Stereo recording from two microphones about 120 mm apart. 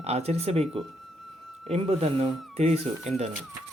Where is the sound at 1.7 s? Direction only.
55° right (ahead or behind).